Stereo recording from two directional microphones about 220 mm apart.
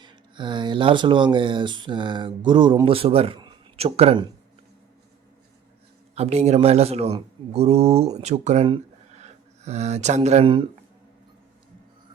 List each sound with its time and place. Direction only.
0.0 s speech: 20° right (ahead or behind)
6.1 s speech: 30° right (ahead or behind)